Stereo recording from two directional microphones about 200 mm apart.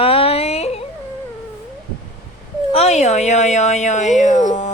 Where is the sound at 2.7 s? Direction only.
35° left (ahead or behind).